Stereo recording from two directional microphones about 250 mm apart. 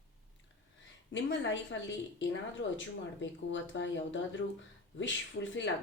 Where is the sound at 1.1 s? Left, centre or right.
Left.